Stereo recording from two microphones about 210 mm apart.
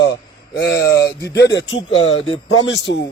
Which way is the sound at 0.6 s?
50° left (ahead or behind).